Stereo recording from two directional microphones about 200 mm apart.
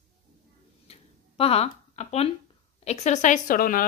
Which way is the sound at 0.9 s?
30° left (ahead or behind).